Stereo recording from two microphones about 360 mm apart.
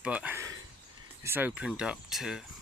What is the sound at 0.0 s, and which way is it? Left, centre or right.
Speech, centre.